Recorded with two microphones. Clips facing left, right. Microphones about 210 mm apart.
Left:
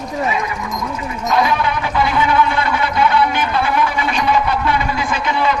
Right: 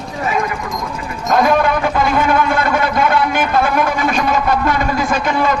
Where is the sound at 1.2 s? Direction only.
50° right (ahead or behind).